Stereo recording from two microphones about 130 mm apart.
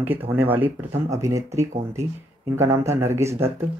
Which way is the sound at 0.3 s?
15° right (ahead or behind).